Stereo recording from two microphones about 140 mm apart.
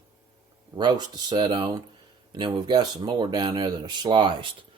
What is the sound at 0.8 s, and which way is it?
Speech, 30° right (ahead or behind).